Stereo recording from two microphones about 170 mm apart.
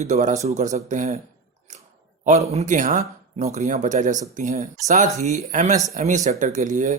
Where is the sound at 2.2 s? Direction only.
40° right (ahead or behind).